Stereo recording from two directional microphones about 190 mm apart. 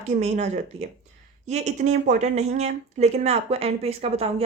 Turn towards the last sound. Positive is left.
turn(degrees=-30)  # may be behind; listen again after turning